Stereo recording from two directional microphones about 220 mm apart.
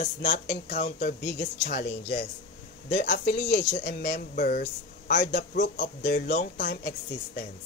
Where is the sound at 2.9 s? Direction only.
45° left (ahead or behind).